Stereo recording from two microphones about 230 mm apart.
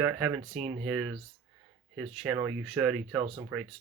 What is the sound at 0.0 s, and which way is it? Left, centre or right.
Speech, centre.